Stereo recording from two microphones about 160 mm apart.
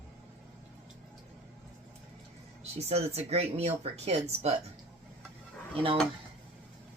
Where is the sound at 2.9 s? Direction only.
40° right (ahead or behind).